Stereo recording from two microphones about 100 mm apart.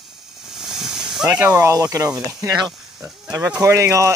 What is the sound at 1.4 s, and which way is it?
Speech, 25° right (ahead or behind).